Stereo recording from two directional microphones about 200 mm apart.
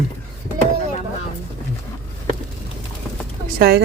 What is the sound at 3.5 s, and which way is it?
Speech, 50° right (ahead or behind).